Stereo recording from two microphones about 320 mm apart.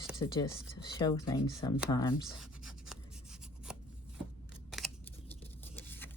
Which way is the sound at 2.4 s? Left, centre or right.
Centre.